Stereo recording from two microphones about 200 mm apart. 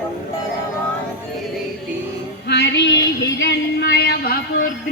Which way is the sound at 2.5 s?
55° left (ahead or behind).